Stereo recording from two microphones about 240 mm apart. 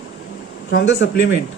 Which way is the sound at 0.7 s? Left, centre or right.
Left.